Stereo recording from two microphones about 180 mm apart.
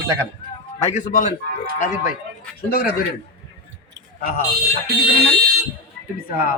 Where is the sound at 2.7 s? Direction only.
60° left (ahead or behind).